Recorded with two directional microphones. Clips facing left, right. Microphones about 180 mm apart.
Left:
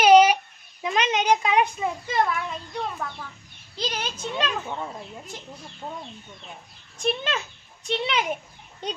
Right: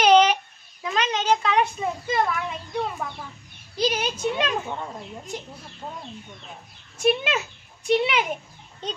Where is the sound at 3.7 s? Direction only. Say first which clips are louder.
Right 6 dB; 10° right (ahead or behind).